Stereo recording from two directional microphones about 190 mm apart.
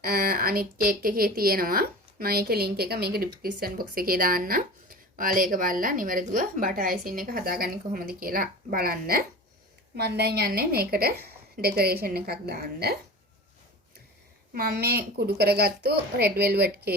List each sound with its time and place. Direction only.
0.0 s a woman's voice: 55° right (ahead or behind)
14.5 s a woman's voice: 55° right (ahead or behind)